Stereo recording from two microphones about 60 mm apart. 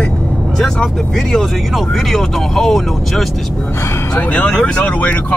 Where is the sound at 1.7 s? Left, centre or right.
Centre.